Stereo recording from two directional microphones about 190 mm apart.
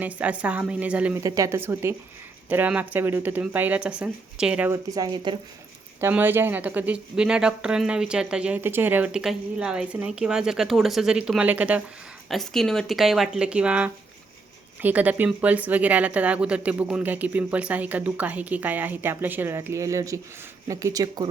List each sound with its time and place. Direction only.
0.0 s speech: 5° right (ahead or behind); by 5.4 s 25° right (ahead or behind)
6.0 s speech: 10° right (ahead or behind)